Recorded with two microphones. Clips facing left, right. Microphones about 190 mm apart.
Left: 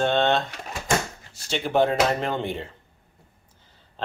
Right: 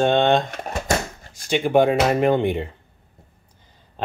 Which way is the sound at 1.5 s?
15° right (ahead or behind).